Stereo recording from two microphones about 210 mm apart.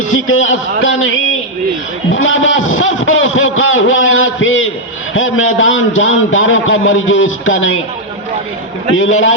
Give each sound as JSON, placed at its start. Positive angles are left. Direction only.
{"t": 0.1, "sound": "a man's voice", "side_deg": 70}
{"t": 9.0, "sound": "a man's voice", "side_deg": 70}